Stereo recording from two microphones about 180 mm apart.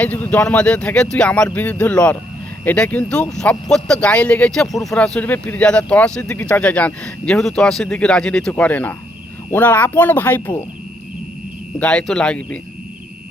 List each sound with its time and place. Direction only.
0.0 s speech: 10° left (ahead or behind)
4.7 s speech: 20° left (ahead or behind)
4.9 s speech: 5° left (ahead or behind)
11.8 s speech: 5° left (ahead or behind)